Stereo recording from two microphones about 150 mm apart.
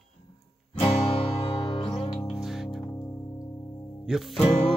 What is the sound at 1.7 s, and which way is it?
Music, 35° left (ahead or behind).